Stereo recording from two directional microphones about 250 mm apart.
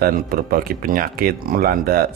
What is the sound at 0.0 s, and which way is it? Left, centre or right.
Speech, right.